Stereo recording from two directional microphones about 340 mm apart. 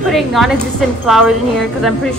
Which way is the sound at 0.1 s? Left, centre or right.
Centre.